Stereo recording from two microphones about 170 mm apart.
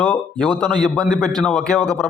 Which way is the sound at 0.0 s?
5° left (ahead or behind).